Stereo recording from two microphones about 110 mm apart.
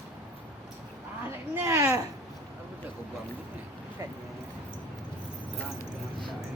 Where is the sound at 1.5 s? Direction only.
25° right (ahead or behind).